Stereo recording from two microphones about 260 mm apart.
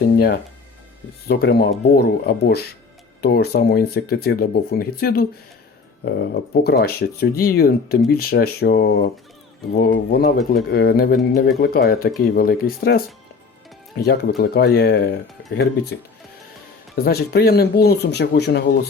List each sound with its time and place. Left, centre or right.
0.0 s speech: left
14.0 s speech: left
16.9 s speech: left